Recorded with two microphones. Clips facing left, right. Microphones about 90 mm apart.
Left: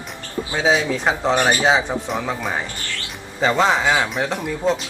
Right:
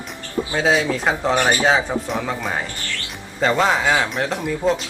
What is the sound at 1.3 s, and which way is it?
Speech, 20° left (ahead or behind).